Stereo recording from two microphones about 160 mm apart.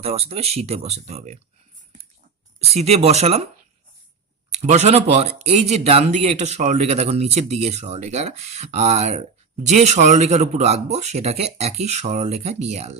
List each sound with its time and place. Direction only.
0.0 s speech: 40° right (ahead or behind)
2.6 s speech: 40° right (ahead or behind)
4.6 s speech: 45° right (ahead or behind)